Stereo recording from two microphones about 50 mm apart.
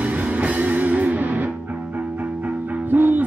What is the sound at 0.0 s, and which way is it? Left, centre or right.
Music, right.